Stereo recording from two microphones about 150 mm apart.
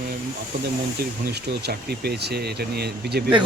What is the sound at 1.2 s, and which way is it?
Speech, 90° right.